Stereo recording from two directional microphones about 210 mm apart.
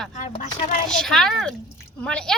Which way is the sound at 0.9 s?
Centre (ahead or behind).